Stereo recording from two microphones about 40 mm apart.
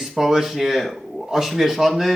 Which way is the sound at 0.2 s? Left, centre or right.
Centre.